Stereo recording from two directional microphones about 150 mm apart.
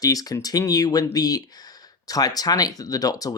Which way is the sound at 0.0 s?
25° left (ahead or behind).